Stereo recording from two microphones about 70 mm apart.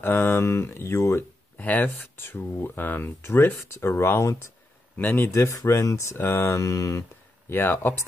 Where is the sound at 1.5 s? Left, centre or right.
Left.